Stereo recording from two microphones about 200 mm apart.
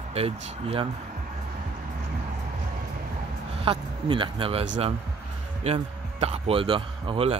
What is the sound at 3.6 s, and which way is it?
Speech, 25° right (ahead or behind).